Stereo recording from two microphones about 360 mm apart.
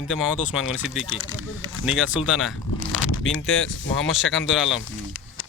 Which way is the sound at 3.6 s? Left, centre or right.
Left.